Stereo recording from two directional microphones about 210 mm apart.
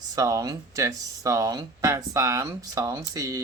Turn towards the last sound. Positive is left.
turn(degrees=-15)  # may be behind; listen again after turning